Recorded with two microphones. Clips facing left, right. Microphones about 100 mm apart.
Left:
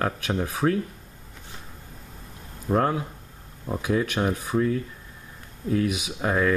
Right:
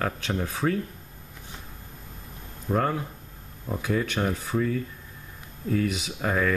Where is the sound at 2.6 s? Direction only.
10° left (ahead or behind).